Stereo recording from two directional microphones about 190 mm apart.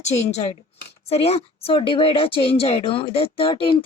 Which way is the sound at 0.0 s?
35° left (ahead or behind).